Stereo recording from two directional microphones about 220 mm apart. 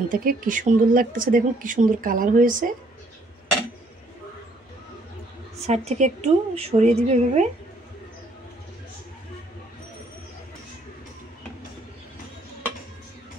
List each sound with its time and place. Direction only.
0.1 s speech: 40° right (ahead or behind)
5.7 s a woman's voice: 30° right (ahead or behind)